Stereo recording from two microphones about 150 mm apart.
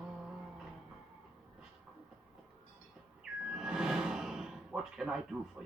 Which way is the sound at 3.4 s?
5° right (ahead or behind).